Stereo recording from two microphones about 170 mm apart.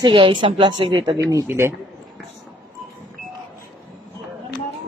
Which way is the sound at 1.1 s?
15° right (ahead or behind).